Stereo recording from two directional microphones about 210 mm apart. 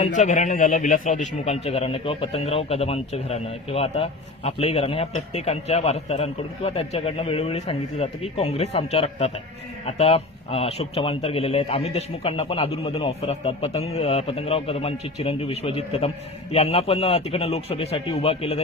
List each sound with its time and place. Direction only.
0.0 s a man's voice: 35° left (ahead or behind)